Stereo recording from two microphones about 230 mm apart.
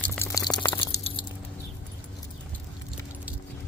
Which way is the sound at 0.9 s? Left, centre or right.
Left.